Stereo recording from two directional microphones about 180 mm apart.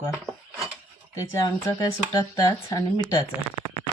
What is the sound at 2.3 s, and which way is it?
Speech, 20° left (ahead or behind).